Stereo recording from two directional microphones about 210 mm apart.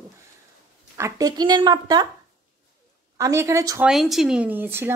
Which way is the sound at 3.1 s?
15° right (ahead or behind).